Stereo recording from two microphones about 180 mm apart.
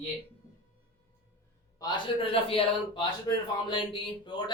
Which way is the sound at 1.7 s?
25° left (ahead or behind).